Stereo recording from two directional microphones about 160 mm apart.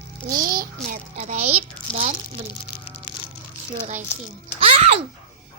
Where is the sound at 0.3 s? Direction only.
65° right (ahead or behind); by 1.5 s 50° right (ahead or behind).